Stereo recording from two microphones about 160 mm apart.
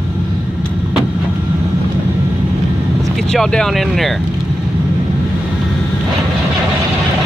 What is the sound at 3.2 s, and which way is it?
Speech, 5° left (ahead or behind).